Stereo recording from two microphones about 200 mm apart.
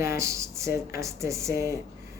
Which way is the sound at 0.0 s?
15° right (ahead or behind).